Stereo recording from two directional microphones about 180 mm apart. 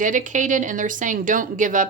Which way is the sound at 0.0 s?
45° right (ahead or behind).